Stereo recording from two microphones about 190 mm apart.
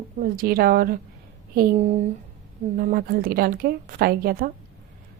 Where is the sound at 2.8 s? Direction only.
50° right (ahead or behind).